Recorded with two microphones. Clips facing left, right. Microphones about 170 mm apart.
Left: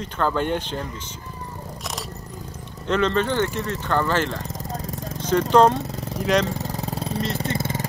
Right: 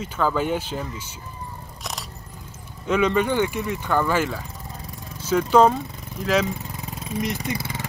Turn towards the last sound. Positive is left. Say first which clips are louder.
# left 3 dB
turn(degrees=45)  # may be behind; listen again after turning